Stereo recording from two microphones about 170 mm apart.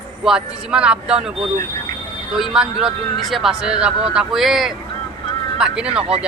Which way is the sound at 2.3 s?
5° right (ahead or behind).